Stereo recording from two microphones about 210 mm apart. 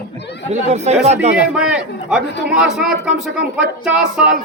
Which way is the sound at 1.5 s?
5° right (ahead or behind).